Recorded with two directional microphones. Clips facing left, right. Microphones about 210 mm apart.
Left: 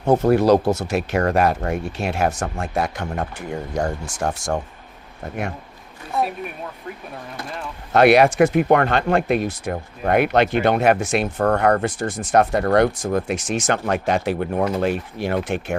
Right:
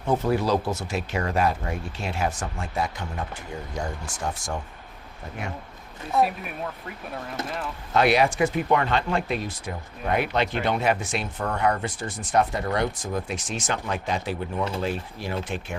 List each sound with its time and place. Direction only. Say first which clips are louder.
0.0 s speech: left 7 dB; 45° left (ahead or behind)
0.3 s speech: left 10 dB; 65° left (ahead or behind)
4.2 s speech: left 7 dB; 80° left
6.1 s speech: even; centre (ahead or behind)
7.9 s speech: left 7 dB; 65° left (ahead or behind)
11.3 s speech: left 7 dB; 60° left (ahead or behind)